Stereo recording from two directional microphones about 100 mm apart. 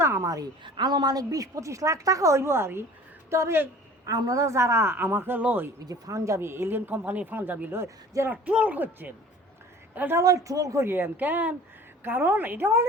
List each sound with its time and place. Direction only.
0.0 s a sound: 25° right (ahead or behind)
0.6 s a woman's voice: 45° right (ahead or behind); by 4.1 s 25° right (ahead or behind)
4.1 s speech: 35° right (ahead or behind); by 5.7 s 15° right (ahead or behind)
5.8 s speech: 35° right (ahead or behind)
8.4 s a woman's voice: 15° right (ahead or behind)
10.2 s speech: 35° right (ahead or behind)